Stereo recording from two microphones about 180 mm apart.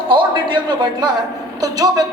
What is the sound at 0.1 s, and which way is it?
A man's voice, 25° right (ahead or behind).